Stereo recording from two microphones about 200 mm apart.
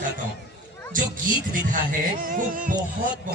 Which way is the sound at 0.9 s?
45° right (ahead or behind).